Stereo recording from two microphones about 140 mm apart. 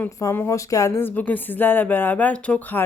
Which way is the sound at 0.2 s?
20° left (ahead or behind).